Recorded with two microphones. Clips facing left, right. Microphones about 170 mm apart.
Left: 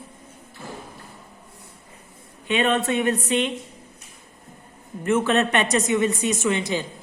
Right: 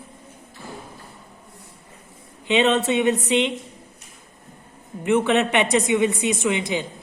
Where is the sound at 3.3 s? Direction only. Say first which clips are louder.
Right 2 dB; 20° right (ahead or behind).